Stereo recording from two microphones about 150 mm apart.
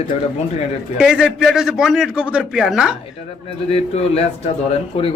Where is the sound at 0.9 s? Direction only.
5° right (ahead or behind).